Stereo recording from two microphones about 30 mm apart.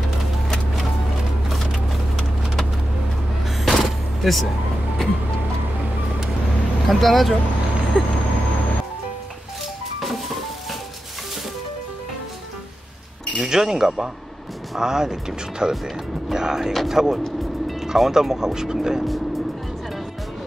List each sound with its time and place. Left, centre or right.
3.7 s a sound: centre
6.9 s speech: centre
9.9 s music: centre
13.4 s speech: centre